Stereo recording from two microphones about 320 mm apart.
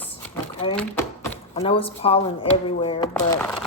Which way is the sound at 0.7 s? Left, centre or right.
Centre.